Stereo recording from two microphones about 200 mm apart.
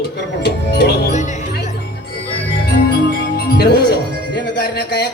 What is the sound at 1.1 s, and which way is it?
Music, 35° left (ahead or behind).